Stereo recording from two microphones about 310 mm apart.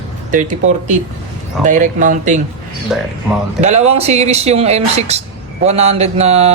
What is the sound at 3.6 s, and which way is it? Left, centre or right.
Speech, right.